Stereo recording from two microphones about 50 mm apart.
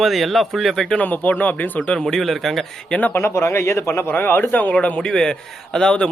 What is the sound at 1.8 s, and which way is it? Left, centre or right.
Speech, centre.